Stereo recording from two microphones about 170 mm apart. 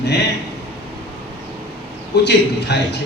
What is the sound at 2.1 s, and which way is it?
Speech, 80° left.